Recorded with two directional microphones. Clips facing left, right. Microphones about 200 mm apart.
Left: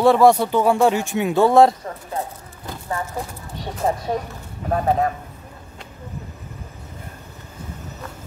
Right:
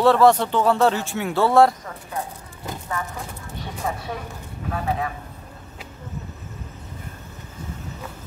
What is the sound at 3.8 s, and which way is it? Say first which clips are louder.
Speech: left 8 dB; 40° left (ahead or behind).